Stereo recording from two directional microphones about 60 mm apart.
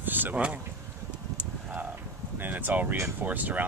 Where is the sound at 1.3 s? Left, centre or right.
Right.